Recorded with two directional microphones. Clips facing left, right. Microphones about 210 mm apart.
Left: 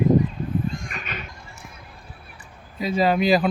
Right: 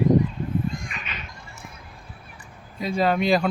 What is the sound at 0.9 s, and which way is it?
Music, 45° left (ahead or behind).